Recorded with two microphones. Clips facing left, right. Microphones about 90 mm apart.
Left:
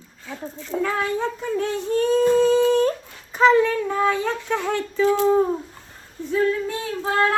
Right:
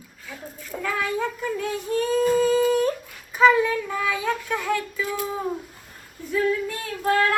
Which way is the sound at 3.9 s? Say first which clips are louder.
Left 4 dB; 30° left (ahead or behind).